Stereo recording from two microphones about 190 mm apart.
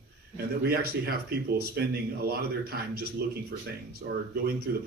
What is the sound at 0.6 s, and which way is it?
Speech, 55° right (ahead or behind).